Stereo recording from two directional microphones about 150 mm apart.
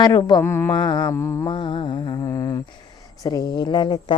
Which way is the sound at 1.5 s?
35° left (ahead or behind).